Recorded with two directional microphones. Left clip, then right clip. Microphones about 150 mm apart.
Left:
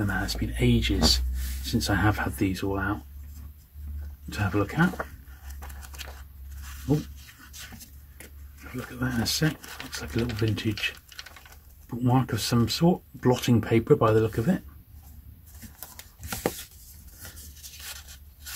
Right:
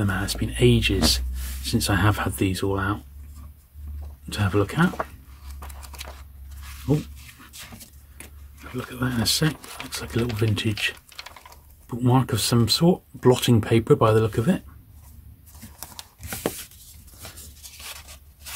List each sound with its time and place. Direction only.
0.0 s speech: 40° right (ahead or behind)
4.4 s speech: 40° right (ahead or behind)
8.9 s speech: 40° right (ahead or behind)
11.9 s speech: 40° right (ahead or behind)
17.2 s a sound: 25° right (ahead or behind)